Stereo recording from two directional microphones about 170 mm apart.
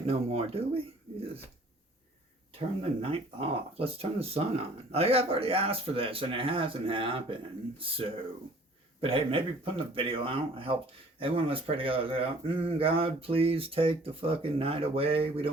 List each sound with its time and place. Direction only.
0.0 s speech: 35° right (ahead or behind)
2.6 s speech: 35° right (ahead or behind)